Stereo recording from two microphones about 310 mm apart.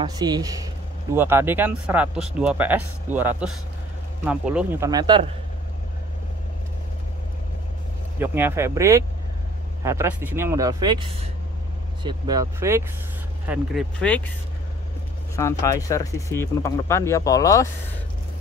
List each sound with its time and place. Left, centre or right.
0.0 s speech: centre
8.2 s speech: centre
15.3 s speech: centre